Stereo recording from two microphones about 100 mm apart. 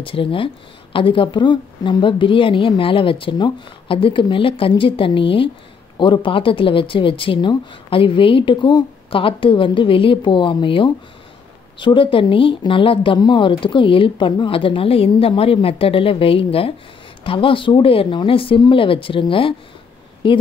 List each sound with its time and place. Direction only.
0.0 s speech: 60° left (ahead or behind)